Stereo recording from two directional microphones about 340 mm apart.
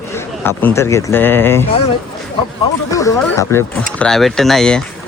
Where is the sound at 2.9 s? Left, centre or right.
Centre.